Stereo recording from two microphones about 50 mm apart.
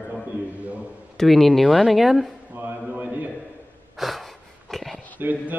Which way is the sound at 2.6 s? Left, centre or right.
Right.